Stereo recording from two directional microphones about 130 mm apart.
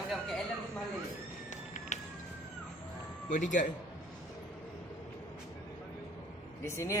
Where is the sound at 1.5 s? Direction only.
65° left (ahead or behind).